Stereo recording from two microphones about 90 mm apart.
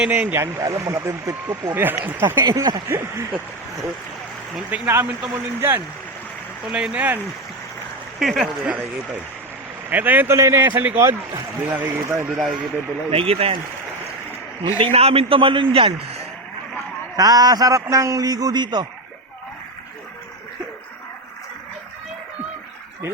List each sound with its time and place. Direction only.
0.0 s speech: 20° right (ahead or behind)
0.6 s a man's voice: 45° right (ahead or behind)
1.7 s speech: 20° right (ahead or behind)
2.4 s a man's voice: 45° right (ahead or behind)
2.9 s speech: 25° right (ahead or behind)
4.9 s speech: 25° right (ahead or behind)
6.7 s speech: 10° right (ahead or behind)
8.2 s speech: centre (ahead or behind)
8.6 s speech: 15° right (ahead or behind)
12.4 s speech: 5° right (ahead or behind)
13.1 s a man's voice: 90° right
14.8 s a man's voice: 90° right
17.2 s a man's voice: 45° right (ahead or behind)